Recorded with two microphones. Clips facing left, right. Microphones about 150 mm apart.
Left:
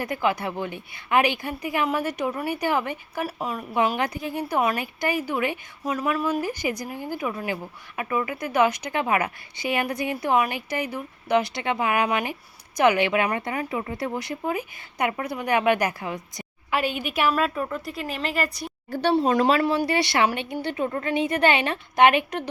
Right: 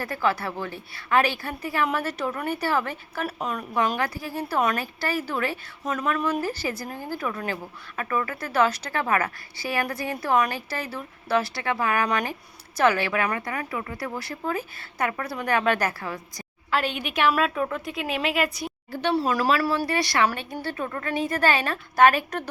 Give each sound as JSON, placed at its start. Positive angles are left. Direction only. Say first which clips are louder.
{"t": 0.0, "sound": "speech", "louder": "left 1 dB", "side_deg": 15}
{"t": 3.2, "sound": "a woman's voice", "louder": "right 3 dB", "side_deg": 5}
{"t": 3.8, "sound": "speech", "louder": "left 2 dB", "side_deg": 20}
{"t": 16.7, "sound": "a woman's voice", "louder": "left 1 dB", "side_deg": 5}
{"t": 19.1, "sound": "speech", "louder": "left 3 dB", "side_deg": 25}